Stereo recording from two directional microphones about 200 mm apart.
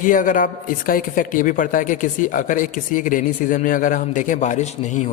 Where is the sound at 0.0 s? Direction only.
40° left (ahead or behind).